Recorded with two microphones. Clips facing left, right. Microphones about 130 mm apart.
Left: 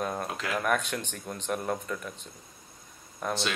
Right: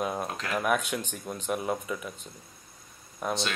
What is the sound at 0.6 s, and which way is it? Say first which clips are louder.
A man's voice: right 2 dB; 10° right (ahead or behind).